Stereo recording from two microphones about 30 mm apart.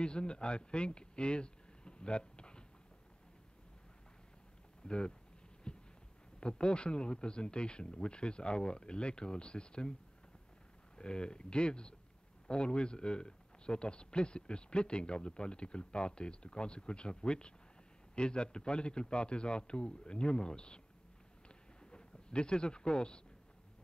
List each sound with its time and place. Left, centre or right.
0.0 s speech: left
4.8 s speech: left
5.7 s heart murmur: left
6.4 s speech: left
11.0 s speech: left
21.9 s speech: left